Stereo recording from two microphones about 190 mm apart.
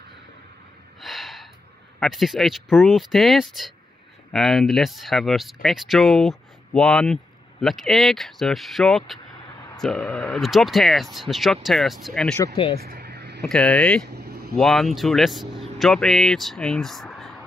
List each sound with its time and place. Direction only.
1.0 s gasp: centre (ahead or behind)
2.0 s speech: centre (ahead or behind)
12.8 s vehicle: 55° right (ahead or behind)
13.5 s speech: 5° left (ahead or behind)
14.0 s vehicle: 60° right (ahead or behind)
14.5 s speech: centre (ahead or behind)